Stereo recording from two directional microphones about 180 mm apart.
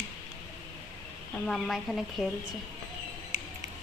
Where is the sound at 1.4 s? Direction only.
Centre (ahead or behind).